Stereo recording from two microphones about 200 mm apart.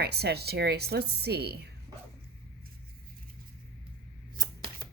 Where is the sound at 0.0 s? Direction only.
55° right (ahead or behind).